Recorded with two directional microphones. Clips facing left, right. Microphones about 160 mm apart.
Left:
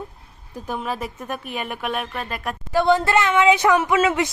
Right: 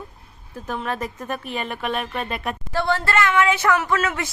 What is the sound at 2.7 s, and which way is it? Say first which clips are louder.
A woman's voice: left 5 dB; 15° left (ahead or behind).